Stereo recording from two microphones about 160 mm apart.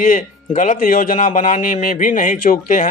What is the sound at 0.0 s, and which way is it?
Speech, 55° left (ahead or behind).